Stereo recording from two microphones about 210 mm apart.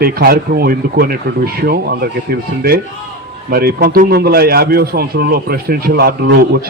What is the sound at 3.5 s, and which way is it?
A man's voice, 45° right (ahead or behind).